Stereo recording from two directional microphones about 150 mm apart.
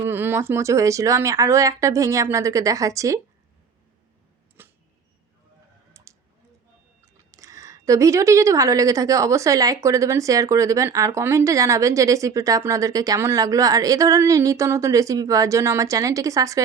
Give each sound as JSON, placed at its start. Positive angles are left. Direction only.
{"t": 0.0, "sound": "speech", "side_deg": -15}
{"t": 4.6, "sound": "a sound", "side_deg": -15}
{"t": 7.3, "sound": "a woman's voice", "side_deg": -20}